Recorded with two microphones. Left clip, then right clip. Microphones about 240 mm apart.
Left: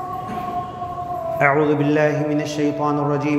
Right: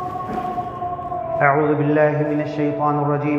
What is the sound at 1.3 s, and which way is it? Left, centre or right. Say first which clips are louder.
A man's voice: even; left.